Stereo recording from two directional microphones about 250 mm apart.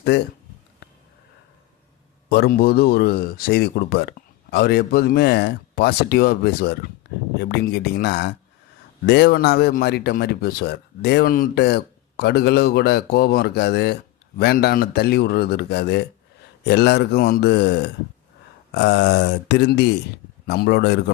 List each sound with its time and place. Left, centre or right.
0.1 s speech: left
2.3 s speech: left